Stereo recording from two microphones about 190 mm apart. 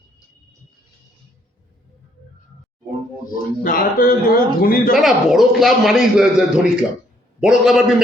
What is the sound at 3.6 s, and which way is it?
Speech, 50° left (ahead or behind).